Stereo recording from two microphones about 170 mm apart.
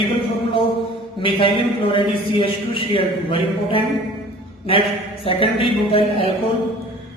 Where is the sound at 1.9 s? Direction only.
30° left (ahead or behind).